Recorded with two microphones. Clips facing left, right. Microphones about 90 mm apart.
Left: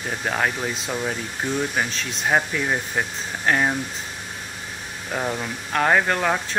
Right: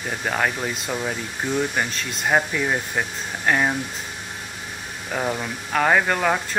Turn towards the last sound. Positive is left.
turn(degrees=0)  # may be behind; listen again after turning